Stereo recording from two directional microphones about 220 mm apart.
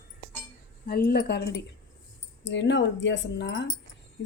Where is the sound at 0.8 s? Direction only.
45° left (ahead or behind).